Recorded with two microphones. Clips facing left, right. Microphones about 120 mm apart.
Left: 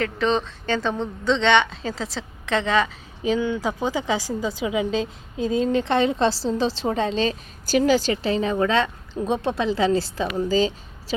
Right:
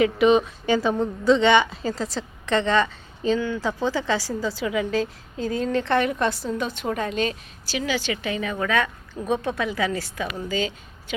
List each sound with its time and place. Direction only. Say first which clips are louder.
0.0 s a woman's voice: right 5 dB; 10° right (ahead or behind); by 3.3 s 5° left (ahead or behind)
3.3 s a woman's voice: left 1 dB; 15° left (ahead or behind)
7.7 s a woman's voice: left 7 dB; 40° left (ahead or behind)